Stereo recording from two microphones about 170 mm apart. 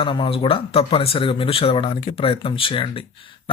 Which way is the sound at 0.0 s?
30° left (ahead or behind).